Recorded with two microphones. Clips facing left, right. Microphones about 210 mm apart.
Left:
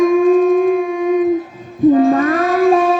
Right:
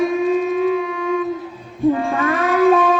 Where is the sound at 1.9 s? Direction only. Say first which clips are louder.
Left 8 dB; 40° left (ahead or behind).